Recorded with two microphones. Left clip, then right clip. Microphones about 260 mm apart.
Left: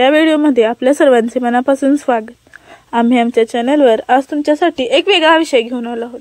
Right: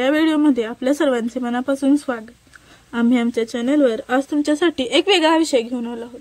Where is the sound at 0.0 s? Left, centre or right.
Centre.